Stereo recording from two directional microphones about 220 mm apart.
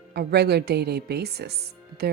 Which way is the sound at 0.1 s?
45° right (ahead or behind).